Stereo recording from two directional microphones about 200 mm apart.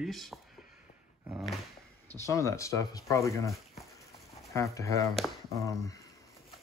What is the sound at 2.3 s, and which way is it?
Speech, 15° left (ahead or behind).